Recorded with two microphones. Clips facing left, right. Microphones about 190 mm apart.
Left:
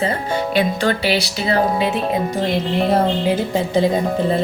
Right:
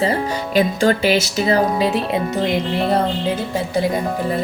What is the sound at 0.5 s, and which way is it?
Speech, 40° right (ahead or behind).